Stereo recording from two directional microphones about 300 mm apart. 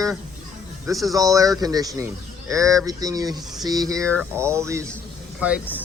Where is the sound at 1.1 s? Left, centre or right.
Centre.